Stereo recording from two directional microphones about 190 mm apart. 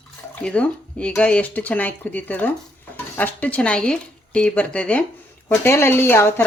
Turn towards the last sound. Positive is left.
turn(degrees=10)  # may be behind; listen again after turning